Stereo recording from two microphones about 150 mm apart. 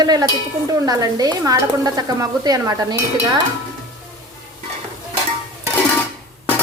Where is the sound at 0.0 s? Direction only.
25° right (ahead or behind).